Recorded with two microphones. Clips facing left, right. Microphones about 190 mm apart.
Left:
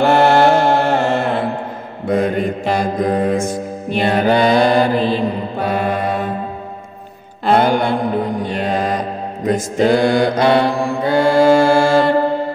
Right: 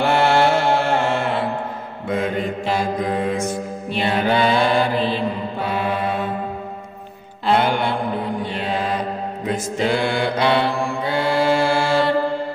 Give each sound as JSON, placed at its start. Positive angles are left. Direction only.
{"t": 0.0, "sound": "mantra", "side_deg": 40}
{"t": 7.4, "sound": "mantra", "side_deg": 45}